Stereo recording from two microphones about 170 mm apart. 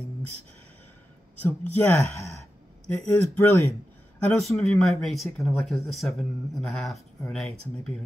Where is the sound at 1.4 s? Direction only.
15° left (ahead or behind).